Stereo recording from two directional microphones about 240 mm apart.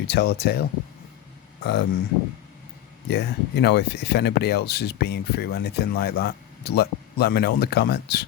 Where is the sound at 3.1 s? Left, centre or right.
Left.